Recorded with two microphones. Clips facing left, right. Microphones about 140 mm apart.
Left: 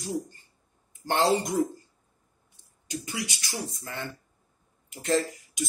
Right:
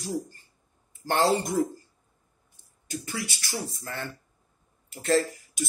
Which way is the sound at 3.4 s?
20° left (ahead or behind).